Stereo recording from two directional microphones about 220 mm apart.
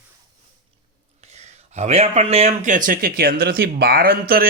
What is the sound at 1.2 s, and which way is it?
Speech, 30° right (ahead or behind).